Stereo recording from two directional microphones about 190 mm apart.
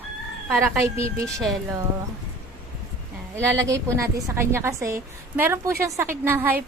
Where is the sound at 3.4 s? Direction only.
15° right (ahead or behind).